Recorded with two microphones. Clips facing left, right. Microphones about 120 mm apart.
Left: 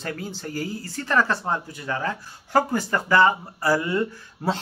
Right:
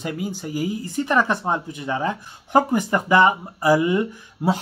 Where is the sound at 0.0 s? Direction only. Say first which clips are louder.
Right 4 dB; 15° right (ahead or behind).